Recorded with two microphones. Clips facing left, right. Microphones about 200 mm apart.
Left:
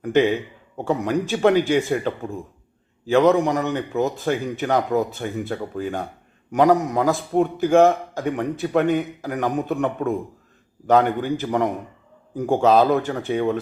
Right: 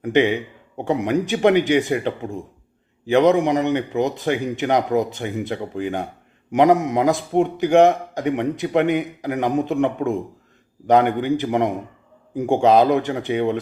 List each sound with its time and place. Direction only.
0.0 s a man's voice: 15° right (ahead or behind)